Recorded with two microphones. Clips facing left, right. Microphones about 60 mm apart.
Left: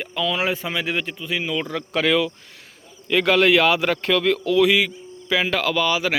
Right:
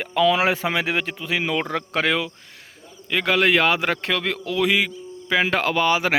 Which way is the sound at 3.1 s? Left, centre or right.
Centre.